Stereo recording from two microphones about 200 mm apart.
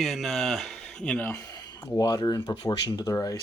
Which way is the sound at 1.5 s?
20° left (ahead or behind).